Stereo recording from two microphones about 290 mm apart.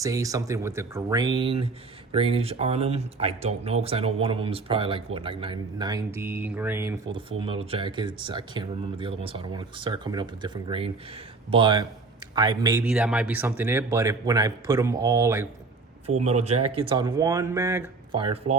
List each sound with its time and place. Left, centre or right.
0.0 s speech: centre
16.2 s speech: right